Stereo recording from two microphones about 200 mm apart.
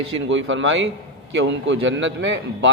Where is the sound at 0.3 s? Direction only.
70° right (ahead or behind).